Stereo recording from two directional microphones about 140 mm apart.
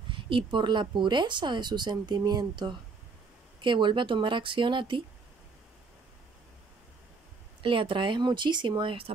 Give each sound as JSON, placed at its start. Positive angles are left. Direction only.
{"t": 0.1, "sound": "speech", "side_deg": -35}
{"t": 7.6, "sound": "speech", "side_deg": -40}